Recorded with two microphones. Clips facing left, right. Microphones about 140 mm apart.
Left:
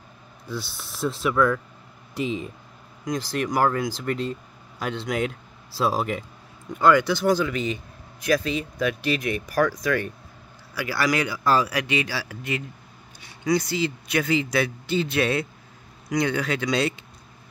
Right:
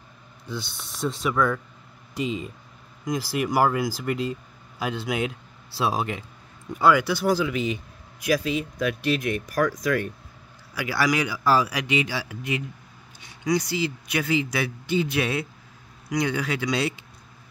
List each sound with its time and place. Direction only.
0.5 s speech: centre (ahead or behind)
10.7 s speech: 15° right (ahead or behind)